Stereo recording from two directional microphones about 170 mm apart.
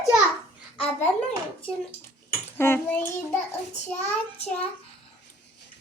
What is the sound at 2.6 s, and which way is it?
Speech, 15° left (ahead or behind).